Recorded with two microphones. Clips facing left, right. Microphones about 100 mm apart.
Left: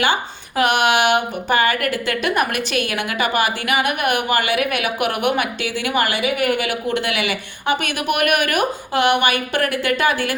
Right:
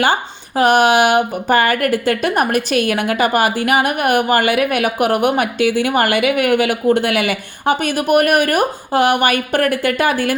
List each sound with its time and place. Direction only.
0.0 s a woman's voice: 40° right (ahead or behind)